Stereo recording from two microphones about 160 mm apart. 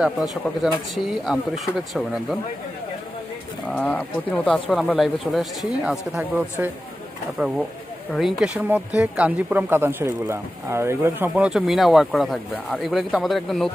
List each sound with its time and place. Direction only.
0.0 s speech: centre (ahead or behind)
3.6 s speech: 10° left (ahead or behind)